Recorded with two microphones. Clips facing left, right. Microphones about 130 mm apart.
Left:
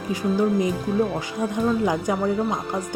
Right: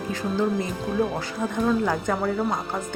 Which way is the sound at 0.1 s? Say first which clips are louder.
Left 4 dB; 10° left (ahead or behind).